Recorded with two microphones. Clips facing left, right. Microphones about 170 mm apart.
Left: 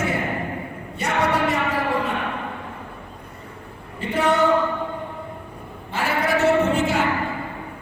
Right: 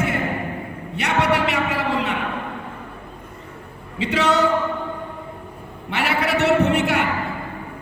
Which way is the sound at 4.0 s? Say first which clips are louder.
Right 1 dB; 80° right.